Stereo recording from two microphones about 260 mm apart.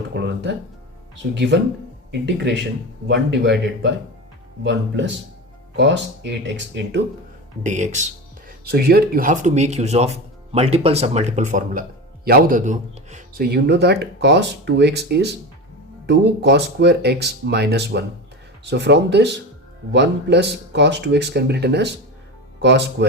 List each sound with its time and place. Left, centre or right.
0.1 s speech: right
7.6 s speech: right